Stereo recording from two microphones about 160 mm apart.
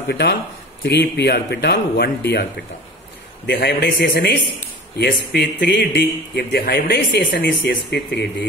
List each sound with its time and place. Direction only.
0.1 s a man's voice: 90° left